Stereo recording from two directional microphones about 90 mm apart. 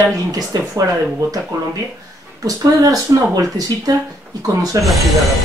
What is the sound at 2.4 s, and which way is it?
Speech, 40° right (ahead or behind).